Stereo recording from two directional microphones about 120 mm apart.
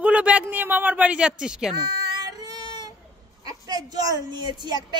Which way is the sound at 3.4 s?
35° right (ahead or behind).